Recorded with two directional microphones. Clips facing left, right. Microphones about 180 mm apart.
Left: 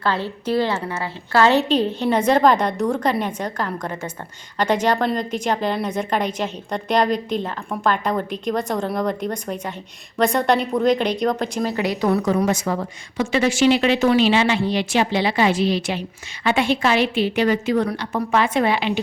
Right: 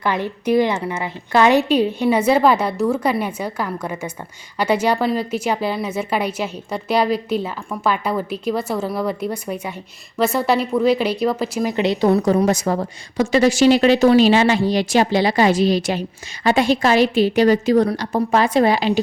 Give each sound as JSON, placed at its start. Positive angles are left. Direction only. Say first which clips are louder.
{"t": 0.0, "sound": "a woman's voice", "louder": "right 2 dB", "side_deg": -15}
{"t": 11.7, "sound": "a woman's voice", "louder": "right 5 dB", "side_deg": -25}